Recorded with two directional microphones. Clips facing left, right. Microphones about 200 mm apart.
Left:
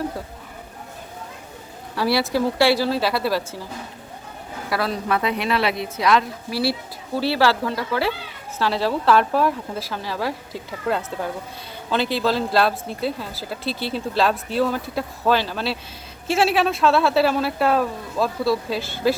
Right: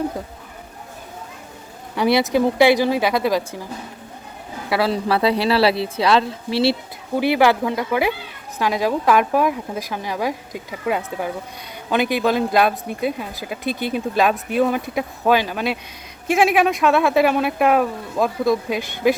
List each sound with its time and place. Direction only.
2.0 s speech: 20° right (ahead or behind)
4.7 s a woman's voice: 30° right (ahead or behind)